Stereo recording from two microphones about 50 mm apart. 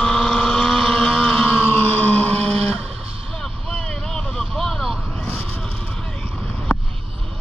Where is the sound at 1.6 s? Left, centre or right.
Left.